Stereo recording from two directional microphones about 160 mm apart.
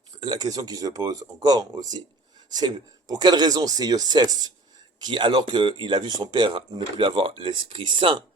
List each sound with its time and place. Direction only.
0.2 s speech: 25° right (ahead or behind)